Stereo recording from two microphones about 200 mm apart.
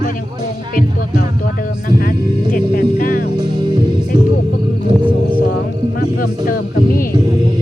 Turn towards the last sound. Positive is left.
turn(degrees=45)  # may be behind; listen again after turning